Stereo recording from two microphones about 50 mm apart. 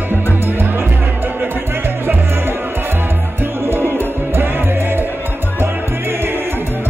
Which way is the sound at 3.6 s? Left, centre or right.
Right.